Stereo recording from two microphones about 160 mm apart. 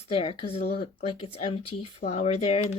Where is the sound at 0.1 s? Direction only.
35° left (ahead or behind).